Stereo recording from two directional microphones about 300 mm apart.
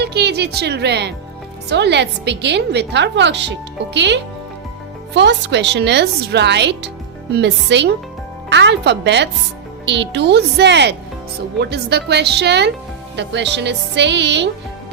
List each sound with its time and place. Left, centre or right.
0.0 s a woman's voice: right